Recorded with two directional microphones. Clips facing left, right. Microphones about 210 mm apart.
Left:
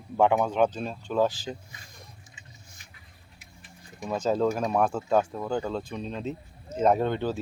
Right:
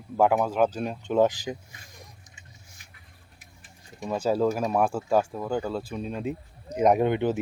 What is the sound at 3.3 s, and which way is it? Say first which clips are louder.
Vehicle: left 4 dB; 45° right (ahead or behind).